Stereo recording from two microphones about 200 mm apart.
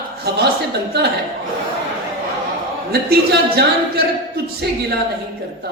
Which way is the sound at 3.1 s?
55° right (ahead or behind).